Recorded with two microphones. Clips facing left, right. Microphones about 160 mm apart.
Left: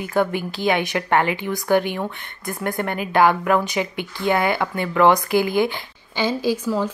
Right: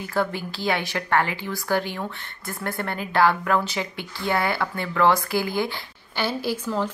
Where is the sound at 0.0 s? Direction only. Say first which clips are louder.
Left 5 dB; 15° left (ahead or behind).